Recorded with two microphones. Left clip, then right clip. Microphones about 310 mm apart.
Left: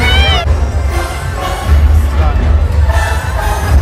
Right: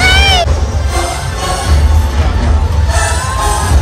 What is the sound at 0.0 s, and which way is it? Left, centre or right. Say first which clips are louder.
Music: right 4 dB; right.